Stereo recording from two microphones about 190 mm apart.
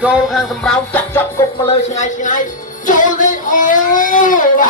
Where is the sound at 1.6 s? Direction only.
40° left (ahead or behind).